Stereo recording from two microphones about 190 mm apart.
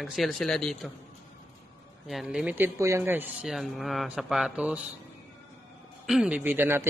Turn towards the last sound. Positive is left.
turn(degrees=-10)  # may be behind; listen again after turning